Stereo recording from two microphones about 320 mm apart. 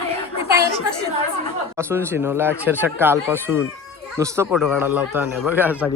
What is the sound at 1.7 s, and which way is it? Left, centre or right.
Speech, centre.